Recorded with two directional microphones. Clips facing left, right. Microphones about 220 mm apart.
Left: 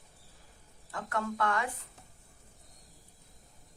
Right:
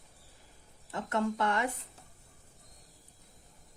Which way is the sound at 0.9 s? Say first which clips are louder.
Right 3 dB; 25° right (ahead or behind).